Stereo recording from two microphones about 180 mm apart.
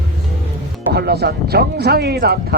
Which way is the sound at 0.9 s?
65° right (ahead or behind).